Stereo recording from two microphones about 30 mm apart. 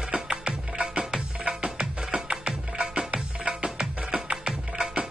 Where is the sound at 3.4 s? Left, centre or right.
Right.